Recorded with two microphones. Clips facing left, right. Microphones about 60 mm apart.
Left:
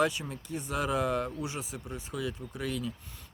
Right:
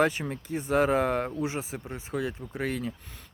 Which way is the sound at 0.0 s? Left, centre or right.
Right.